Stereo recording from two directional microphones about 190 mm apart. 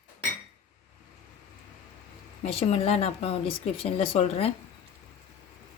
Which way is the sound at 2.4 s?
30° left (ahead or behind).